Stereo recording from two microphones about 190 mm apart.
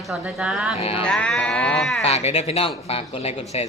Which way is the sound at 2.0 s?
35° left (ahead or behind).